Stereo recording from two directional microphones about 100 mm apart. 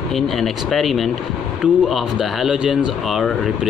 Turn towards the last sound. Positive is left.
turn(degrees=0)  # may be behind; listen again after turning